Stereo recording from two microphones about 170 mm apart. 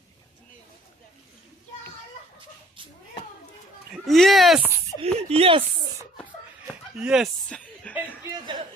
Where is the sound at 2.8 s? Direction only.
30° right (ahead or behind).